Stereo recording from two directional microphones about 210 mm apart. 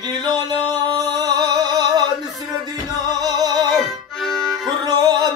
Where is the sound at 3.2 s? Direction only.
20° right (ahead or behind).